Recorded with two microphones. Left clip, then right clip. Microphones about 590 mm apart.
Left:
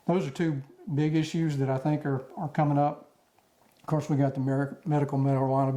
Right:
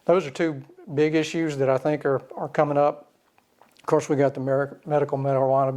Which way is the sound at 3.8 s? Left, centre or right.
Right.